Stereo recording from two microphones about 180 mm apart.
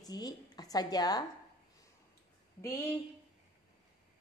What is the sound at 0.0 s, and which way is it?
Speech, 20° left (ahead or behind).